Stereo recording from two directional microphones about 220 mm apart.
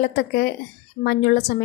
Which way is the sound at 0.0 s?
45° left (ahead or behind).